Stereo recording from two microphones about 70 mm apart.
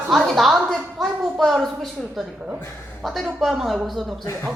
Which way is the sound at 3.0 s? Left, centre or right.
Centre.